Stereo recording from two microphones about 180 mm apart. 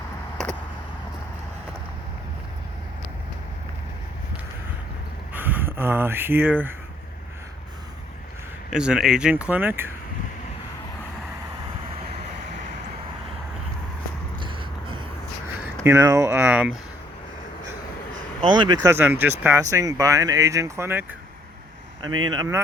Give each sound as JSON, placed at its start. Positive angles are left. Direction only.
{"t": 5.3, "sound": "speech", "side_deg": -10}
{"t": 8.7, "sound": "speech", "side_deg": -5}
{"t": 15.6, "sound": "speech", "side_deg": -15}
{"t": 18.4, "sound": "speech", "side_deg": -25}